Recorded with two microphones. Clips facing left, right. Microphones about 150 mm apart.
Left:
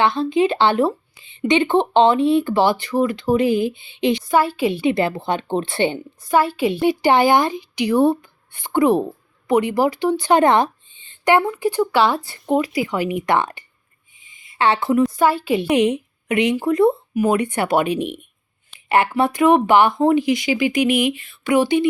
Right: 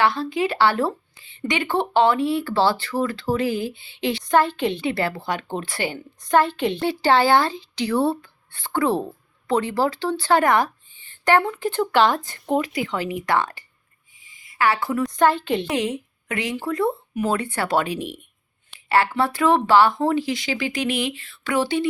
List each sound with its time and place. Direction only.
0.0 s speech: 20° left (ahead or behind)
4.2 s speech: 5° left (ahead or behind); by 6.0 s 25° left (ahead or behind)
6.2 s speech: 5° left (ahead or behind)
14.2 s a sound: 20° left (ahead or behind)
15.1 s speech: 5° left (ahead or behind)
15.8 s speech: 20° left (ahead or behind)